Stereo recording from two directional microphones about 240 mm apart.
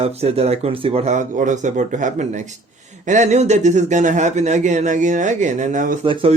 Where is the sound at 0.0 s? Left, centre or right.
Right.